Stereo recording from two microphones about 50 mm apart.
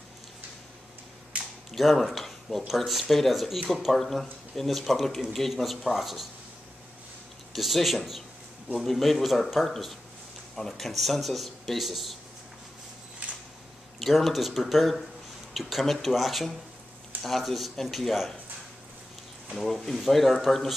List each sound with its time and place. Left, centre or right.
1.7 s speech: centre
7.5 s speech: centre
13.2 s a sound: right
13.9 s speech: centre
19.5 s speech: centre